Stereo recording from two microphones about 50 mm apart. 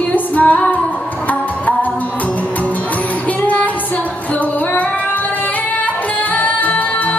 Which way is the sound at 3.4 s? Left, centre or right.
Left.